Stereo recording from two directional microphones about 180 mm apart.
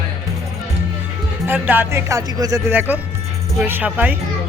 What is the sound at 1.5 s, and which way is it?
Speech, 10° right (ahead or behind).